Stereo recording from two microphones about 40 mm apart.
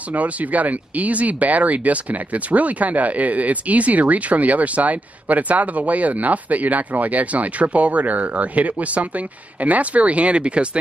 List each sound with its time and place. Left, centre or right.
0.1 s speech: right